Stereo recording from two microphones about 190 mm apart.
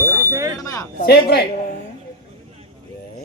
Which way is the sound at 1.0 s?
60° left (ahead or behind).